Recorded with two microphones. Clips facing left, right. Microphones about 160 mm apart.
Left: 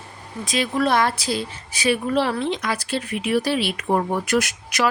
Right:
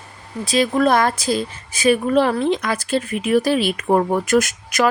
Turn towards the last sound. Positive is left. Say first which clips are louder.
# right 4 dB
turn(degrees=-50)  # may be behind; listen again after turning